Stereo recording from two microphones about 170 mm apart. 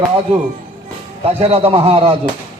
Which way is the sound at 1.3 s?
35° right (ahead or behind).